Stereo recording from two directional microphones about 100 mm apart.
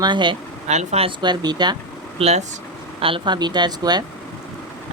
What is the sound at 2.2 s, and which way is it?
Speech, 90° right.